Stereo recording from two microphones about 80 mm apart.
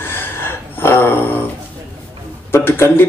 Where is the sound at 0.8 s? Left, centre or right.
Left.